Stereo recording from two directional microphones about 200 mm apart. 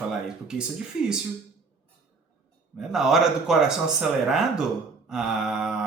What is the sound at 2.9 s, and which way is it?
A man's voice, centre (ahead or behind).